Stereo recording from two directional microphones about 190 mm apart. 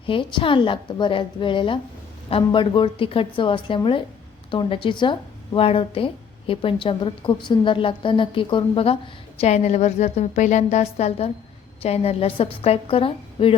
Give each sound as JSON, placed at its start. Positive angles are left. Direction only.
{"t": 0.0, "sound": "a woman's voice", "side_deg": 25}